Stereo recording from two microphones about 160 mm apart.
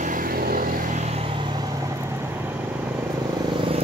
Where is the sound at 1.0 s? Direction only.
40° right (ahead or behind); by 2.6 s 15° right (ahead or behind).